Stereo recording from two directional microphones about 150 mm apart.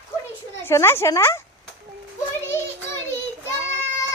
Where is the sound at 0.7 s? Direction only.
15° left (ahead or behind).